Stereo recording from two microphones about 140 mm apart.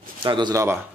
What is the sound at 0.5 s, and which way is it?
Speech, 20° right (ahead or behind).